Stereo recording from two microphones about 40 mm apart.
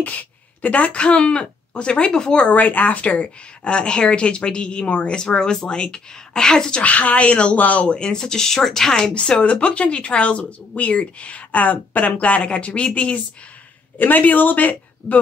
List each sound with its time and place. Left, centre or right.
0.0 s speech: left
2.5 s speech: left
3.6 s speech: left
6.8 s speech: left
7.5 s speech: left
7.8 s speech: left
9.4 s speech: left
13.9 s speech: left